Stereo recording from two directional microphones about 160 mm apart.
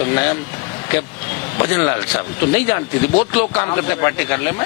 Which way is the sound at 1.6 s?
15° left (ahead or behind).